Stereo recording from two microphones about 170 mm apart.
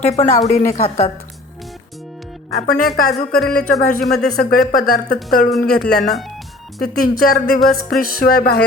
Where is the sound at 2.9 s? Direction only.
60° left (ahead or behind).